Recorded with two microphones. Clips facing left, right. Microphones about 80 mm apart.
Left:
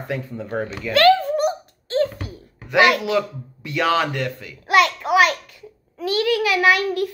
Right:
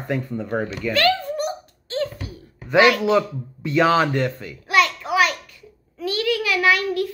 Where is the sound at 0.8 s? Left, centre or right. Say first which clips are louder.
Left 3 dB; centre.